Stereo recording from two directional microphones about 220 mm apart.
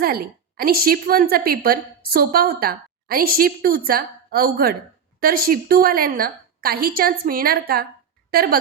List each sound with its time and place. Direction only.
0.0 s a woman's voice: 40° right (ahead or behind)